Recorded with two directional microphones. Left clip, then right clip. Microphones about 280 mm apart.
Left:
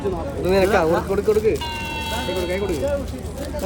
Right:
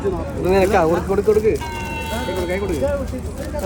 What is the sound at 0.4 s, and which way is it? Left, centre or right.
Speech, centre.